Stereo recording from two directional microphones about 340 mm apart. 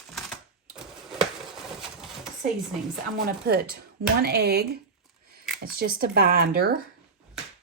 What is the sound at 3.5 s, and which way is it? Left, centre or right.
Speech, right.